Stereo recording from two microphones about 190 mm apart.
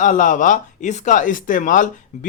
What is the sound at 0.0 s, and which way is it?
Speech, 45° left (ahead or behind).